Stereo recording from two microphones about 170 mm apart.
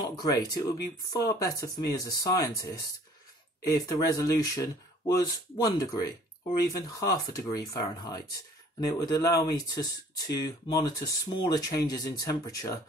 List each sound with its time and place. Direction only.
0.0 s speech: 25° left (ahead or behind)